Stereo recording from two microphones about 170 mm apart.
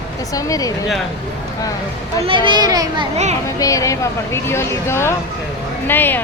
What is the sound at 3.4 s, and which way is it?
Speech, 20° left (ahead or behind).